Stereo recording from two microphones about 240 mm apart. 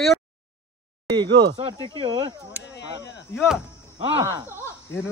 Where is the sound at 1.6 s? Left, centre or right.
Centre.